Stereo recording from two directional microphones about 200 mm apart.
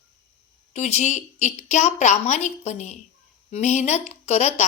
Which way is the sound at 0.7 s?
35° left (ahead or behind).